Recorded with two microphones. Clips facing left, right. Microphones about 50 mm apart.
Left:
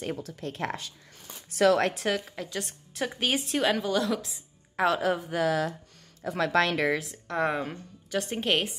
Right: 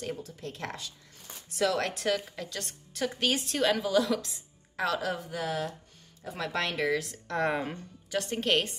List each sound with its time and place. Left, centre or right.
0.2 s speech: left
1.6 s speech: left
2.0 s a woman's voice: centre
3.8 s speech: centre
4.7 s a woman's voice: left
5.3 s speech: left
7.0 s speech: centre
8.2 s a woman's voice: centre